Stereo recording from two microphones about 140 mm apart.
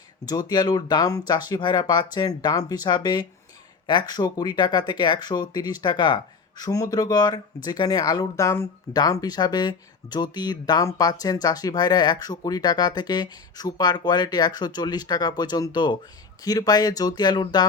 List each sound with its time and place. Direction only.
0.3 s speech: 30° left (ahead or behind)